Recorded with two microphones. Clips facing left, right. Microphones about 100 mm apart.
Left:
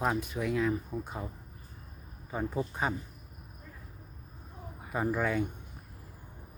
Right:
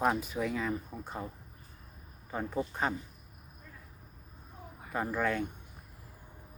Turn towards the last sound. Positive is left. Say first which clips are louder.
# left 2 dB
turn(degrees=5)  # may be behind; listen again after turning